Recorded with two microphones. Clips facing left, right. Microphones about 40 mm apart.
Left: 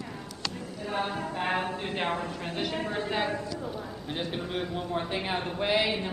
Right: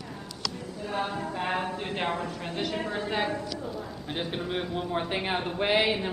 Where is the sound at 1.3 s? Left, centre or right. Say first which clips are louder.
Even; centre.